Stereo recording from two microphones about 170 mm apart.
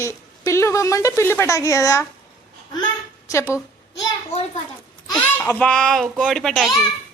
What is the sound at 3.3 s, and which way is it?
Speech, 15° left (ahead or behind).